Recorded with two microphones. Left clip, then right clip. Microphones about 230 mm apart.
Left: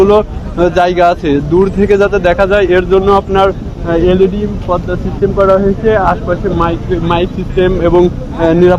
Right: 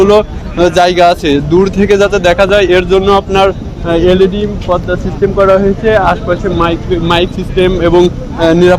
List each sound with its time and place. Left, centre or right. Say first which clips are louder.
0.0 s speech: right 1 dB; right